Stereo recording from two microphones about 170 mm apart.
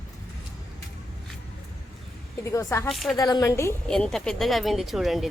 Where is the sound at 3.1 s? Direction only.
20° left (ahead or behind).